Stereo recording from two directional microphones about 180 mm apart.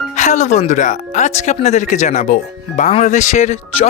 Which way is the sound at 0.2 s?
40° left (ahead or behind).